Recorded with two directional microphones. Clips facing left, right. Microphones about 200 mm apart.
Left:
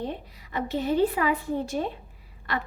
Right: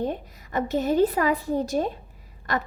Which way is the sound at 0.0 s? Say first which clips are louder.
Right 5 dB; 45° right (ahead or behind).